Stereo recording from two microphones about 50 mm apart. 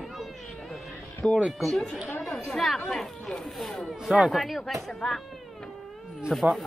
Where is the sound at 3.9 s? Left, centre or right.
Centre.